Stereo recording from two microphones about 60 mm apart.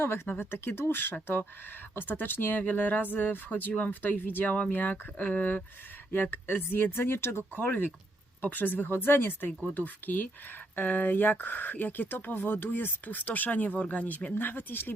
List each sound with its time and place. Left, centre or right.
0.0 s speech: left